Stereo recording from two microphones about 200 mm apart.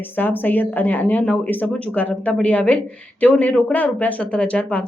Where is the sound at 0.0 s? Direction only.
10° left (ahead or behind).